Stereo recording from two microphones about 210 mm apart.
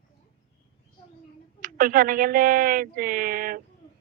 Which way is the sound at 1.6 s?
40° right (ahead or behind).